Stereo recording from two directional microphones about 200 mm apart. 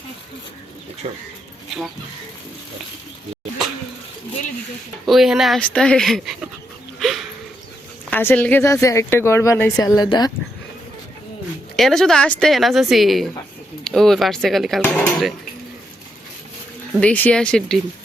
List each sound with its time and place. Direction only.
1.0 s speech: 35° right (ahead or behind)
5.0 s speech: centre (ahead or behind)
8.1 s speech: 10° left (ahead or behind)
11.8 s speech: centre (ahead or behind)
17.0 s speech: 5° left (ahead or behind)